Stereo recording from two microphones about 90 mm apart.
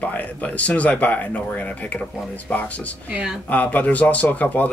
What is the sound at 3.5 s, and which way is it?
Speech, 15° left (ahead or behind).